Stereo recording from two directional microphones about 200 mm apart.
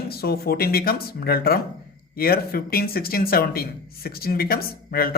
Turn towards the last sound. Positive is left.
turn(degrees=50)  # may be behind; listen again after turning